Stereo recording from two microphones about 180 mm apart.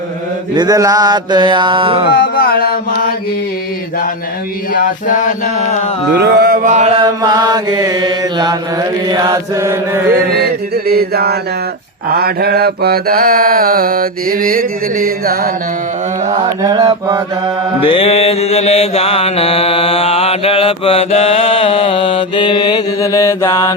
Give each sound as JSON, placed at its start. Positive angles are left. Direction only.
{"t": 0.5, "sound": "mantra", "side_deg": -20}
{"t": 2.0, "sound": "mantra", "side_deg": 60}
{"t": 4.7, "sound": "mantra", "side_deg": 50}
{"t": 6.1, "sound": "mantra", "side_deg": -70}
{"t": 7.0, "sound": "mantra", "side_deg": -20}
{"t": 10.3, "sound": "mantra", "side_deg": -60}
{"t": 16.6, "sound": "mantra", "side_deg": -25}
{"t": 17.7, "sound": "mantra", "side_deg": 30}